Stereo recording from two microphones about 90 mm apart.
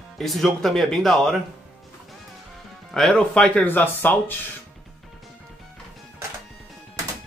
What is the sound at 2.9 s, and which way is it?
Speech, 5° left (ahead or behind).